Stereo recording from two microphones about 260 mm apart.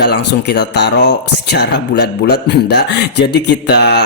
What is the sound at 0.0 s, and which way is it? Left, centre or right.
Speech, left.